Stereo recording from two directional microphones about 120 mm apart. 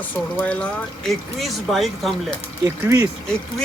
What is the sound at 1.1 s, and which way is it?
Speech, centre (ahead or behind).